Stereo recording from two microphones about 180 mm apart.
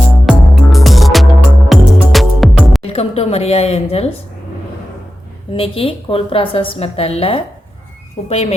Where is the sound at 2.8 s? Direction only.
35° left (ahead or behind).